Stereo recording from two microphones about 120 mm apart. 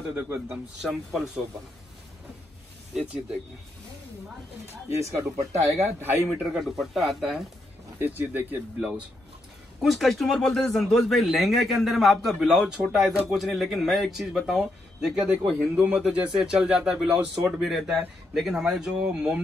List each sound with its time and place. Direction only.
0.1 s speech: 15° right (ahead or behind)
0.8 s a man's voice: centre (ahead or behind)
4.8 s speech: 25° right (ahead or behind)
6.6 s a man's voice: centre (ahead or behind)
8.0 s speech: 15° right (ahead or behind)
9.8 s a man's voice: centre (ahead or behind)